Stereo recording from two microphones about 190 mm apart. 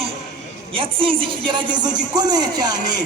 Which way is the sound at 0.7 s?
25° right (ahead or behind).